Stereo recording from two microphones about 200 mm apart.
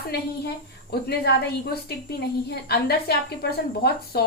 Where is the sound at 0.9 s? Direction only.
55° left (ahead or behind).